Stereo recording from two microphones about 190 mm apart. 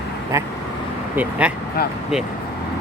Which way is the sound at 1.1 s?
5° right (ahead or behind).